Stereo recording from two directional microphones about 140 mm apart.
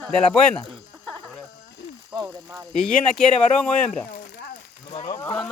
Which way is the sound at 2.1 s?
30° right (ahead or behind).